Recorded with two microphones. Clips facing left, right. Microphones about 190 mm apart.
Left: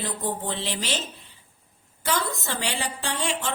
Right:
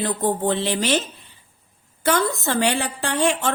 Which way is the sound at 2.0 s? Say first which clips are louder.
Right 7 dB; 55° right (ahead or behind).